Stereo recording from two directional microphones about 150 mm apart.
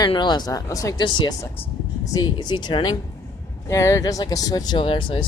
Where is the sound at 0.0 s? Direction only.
30° left (ahead or behind).